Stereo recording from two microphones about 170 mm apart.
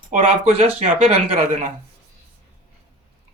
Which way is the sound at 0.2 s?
35° right (ahead or behind).